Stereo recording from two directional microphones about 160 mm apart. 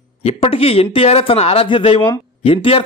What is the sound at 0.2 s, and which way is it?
A man's voice, 35° left (ahead or behind).